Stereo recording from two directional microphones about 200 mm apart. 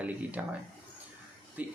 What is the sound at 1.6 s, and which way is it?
Speech, 5° right (ahead or behind).